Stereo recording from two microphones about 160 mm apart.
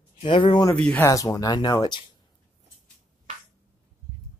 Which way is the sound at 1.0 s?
20° left (ahead or behind).